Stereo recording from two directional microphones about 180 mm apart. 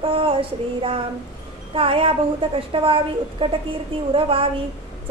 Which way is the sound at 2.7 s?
30° right (ahead or behind).